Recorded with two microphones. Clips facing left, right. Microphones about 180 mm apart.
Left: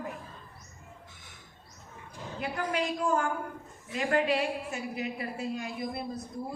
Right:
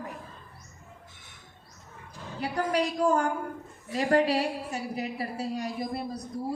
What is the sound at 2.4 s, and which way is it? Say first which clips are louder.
A woman's voice: right 4 dB; 40° right (ahead or behind).